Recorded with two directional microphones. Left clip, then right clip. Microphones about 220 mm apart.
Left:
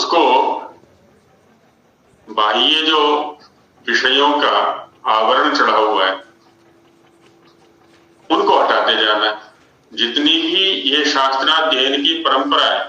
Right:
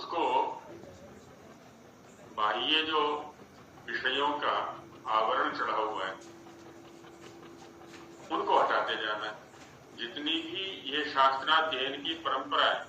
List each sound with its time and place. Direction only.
0.0 s a sound: 50° left (ahead or behind)
2.3 s a man's voice: 50° left (ahead or behind)
8.3 s a man's voice: 50° left (ahead or behind)